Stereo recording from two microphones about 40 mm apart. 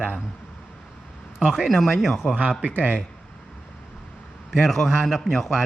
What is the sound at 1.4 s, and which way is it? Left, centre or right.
Speech, centre.